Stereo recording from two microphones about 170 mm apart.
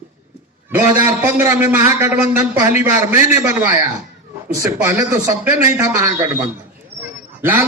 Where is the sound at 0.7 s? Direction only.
15° right (ahead or behind).